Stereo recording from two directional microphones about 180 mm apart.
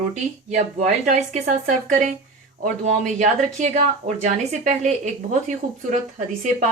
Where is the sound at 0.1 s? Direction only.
40° right (ahead or behind).